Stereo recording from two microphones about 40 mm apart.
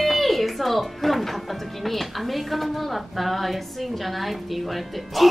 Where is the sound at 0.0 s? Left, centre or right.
Centre.